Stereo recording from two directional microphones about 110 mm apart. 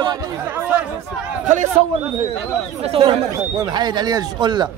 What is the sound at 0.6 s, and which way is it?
Chatter, 20° right (ahead or behind).